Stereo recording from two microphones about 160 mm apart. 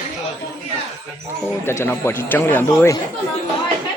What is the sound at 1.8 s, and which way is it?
Speech, 15° left (ahead or behind).